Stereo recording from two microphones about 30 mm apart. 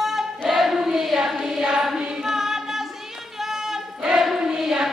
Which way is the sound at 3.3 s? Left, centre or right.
Centre.